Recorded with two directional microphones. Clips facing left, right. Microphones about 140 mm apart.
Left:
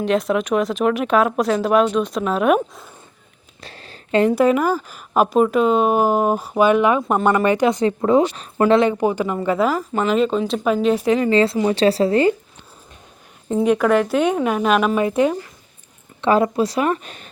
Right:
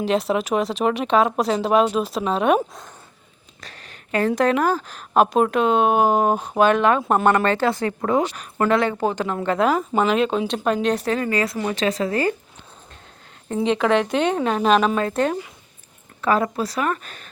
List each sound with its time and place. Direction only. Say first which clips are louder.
0.0 s speech: left 2 dB; centre (ahead or behind)
3.6 s a sound: left 4 dB; 30° left (ahead or behind)
4.3 s speech: even; 5° left (ahead or behind)
10.8 s speech: left 5 dB; 10° left (ahead or behind); by 12.3 s 25° left (ahead or behind)
13.7 s speech: left 2 dB; 5° left (ahead or behind)
16.2 s speech: left 4 dB; 25° left (ahead or behind)